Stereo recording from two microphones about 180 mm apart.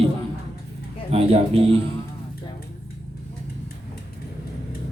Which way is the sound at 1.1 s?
35° right (ahead or behind).